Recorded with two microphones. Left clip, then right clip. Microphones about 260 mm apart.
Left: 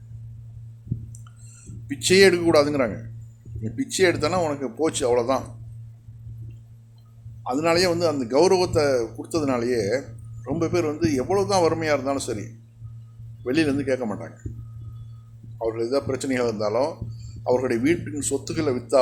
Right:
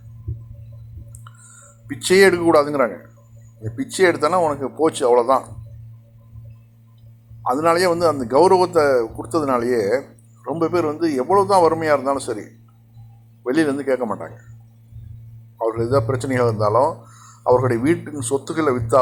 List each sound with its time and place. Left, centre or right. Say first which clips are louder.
2.0 s a man's voice: right 3 dB; centre
7.4 s a man's voice: right 4 dB; centre
13.4 s a man's voice: right 3 dB; centre
15.5 s a man's voice: right 5 dB; centre